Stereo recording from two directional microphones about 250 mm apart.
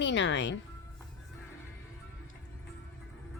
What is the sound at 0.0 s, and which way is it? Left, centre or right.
Speech, left.